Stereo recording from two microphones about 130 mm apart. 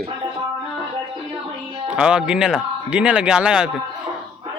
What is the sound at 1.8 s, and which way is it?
A man's voice, 5° right (ahead or behind).